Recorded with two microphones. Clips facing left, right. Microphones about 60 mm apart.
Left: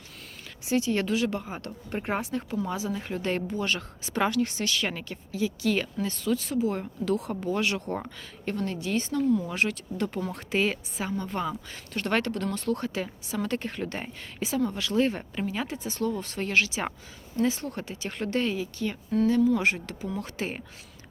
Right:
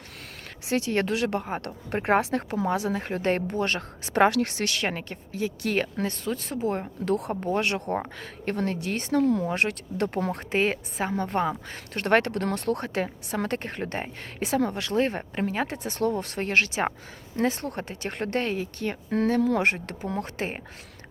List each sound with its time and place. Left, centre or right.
0.6 s a woman's voice: right
4.9 s speech: right
9.5 s speech: right